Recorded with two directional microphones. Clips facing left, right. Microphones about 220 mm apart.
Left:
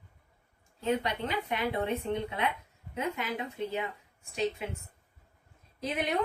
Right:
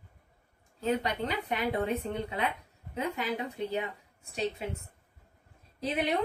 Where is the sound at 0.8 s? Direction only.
40° right (ahead or behind).